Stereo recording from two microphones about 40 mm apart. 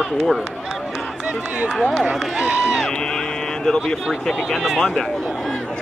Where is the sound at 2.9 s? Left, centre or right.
Centre.